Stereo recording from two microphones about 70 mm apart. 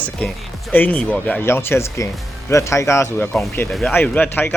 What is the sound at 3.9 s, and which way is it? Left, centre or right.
Speech, left.